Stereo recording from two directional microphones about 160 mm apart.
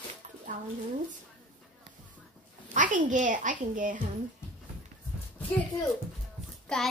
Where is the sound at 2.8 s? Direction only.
55° right (ahead or behind).